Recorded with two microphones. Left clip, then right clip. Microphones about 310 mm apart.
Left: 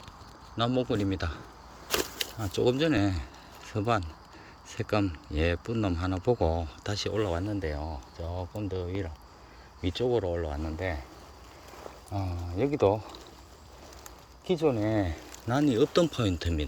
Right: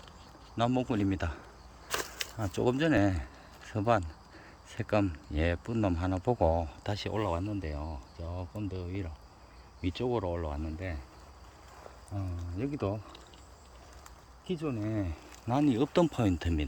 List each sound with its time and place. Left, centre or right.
0.5 s speech: centre
2.4 s speech: centre
12.1 s speech: left
14.4 s speech: left
15.4 s speech: centre